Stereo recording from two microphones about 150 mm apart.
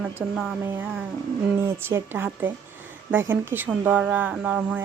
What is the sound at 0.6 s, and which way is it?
Speech, 15° right (ahead or behind).